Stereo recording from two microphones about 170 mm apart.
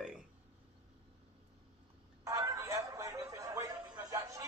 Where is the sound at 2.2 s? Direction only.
20° right (ahead or behind).